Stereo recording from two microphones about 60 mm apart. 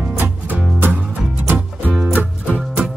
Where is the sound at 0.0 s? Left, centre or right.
Right.